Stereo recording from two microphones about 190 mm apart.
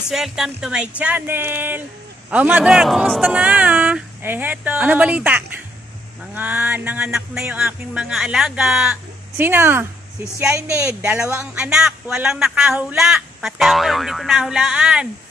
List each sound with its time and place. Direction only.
0.1 s a man's voice: centre (ahead or behind)
11.0 s a man's voice: 5° right (ahead or behind)